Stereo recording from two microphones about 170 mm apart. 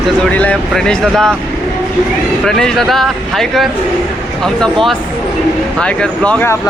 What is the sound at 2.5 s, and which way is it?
Speech, centre (ahead or behind).